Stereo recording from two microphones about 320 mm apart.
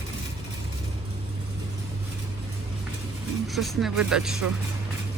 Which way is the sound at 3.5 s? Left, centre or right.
Centre.